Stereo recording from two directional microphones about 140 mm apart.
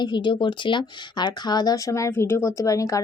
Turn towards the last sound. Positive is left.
turn(degrees=25)  # may be behind; listen again after turning